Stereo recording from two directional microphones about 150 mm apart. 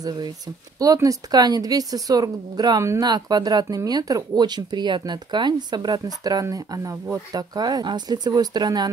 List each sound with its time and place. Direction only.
0.0 s speech: 30° right (ahead or behind)